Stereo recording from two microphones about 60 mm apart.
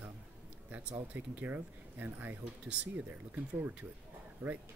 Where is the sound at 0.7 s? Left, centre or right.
Right.